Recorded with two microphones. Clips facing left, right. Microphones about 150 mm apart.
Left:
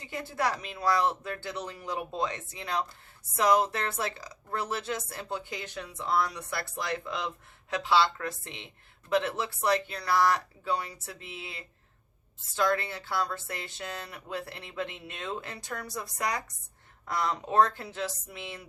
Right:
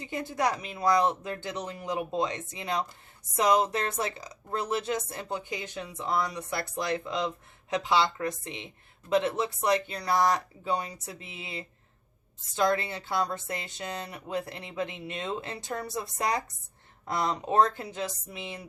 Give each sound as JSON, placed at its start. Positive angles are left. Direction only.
{"t": 0.1, "sound": "speech", "side_deg": -15}